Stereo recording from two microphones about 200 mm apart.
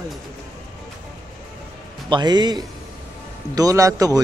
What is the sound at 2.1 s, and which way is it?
A man's voice, 20° right (ahead or behind).